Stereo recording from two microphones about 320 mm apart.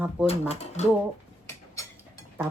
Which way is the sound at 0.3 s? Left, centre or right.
Centre.